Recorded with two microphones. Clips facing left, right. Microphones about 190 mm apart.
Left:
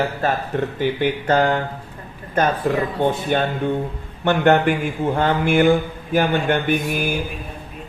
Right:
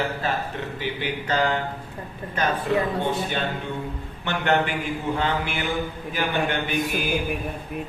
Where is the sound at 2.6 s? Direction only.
45° left (ahead or behind).